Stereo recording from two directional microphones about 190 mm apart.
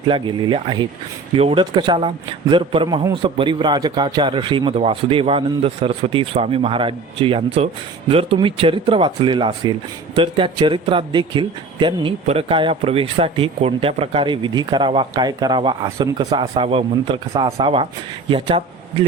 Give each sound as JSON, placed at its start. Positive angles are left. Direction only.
{"t": 0.1, "sound": "a man's voice", "side_deg": -25}